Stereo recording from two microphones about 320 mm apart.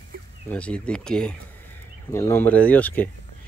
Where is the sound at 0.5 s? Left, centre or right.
Centre.